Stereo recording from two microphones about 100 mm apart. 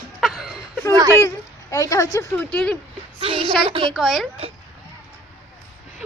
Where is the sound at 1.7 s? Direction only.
30° left (ahead or behind).